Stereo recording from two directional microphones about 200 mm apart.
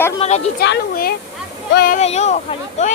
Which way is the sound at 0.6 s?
55° left (ahead or behind).